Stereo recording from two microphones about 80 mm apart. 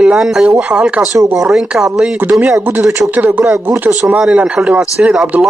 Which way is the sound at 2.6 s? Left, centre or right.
Right.